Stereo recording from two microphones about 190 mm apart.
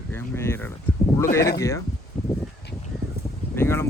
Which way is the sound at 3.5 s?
10° left (ahead or behind).